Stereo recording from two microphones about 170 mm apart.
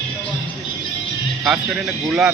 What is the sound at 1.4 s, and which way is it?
Speech, 5° right (ahead or behind).